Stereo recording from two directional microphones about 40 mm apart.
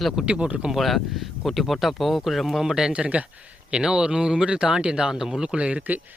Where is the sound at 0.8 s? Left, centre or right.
Centre.